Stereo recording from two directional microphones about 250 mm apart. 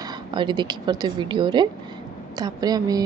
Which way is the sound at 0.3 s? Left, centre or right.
Centre.